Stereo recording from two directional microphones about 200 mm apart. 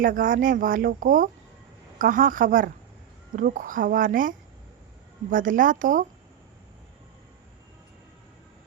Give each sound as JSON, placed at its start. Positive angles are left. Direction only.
{"t": 0.0, "sound": "a woman's voice", "side_deg": -45}